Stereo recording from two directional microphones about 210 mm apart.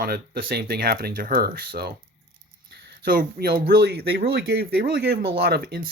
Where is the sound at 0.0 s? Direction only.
45° right (ahead or behind).